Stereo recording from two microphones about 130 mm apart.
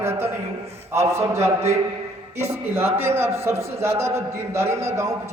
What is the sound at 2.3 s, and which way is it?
A man's voice, 20° right (ahead or behind).